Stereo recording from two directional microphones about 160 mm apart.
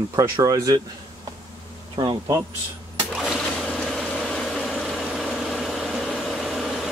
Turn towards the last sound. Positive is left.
turn(degrees=0)  # may be behind; listen again after turning